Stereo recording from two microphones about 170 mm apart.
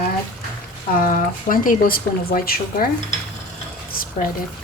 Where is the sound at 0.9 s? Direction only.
55° left (ahead or behind).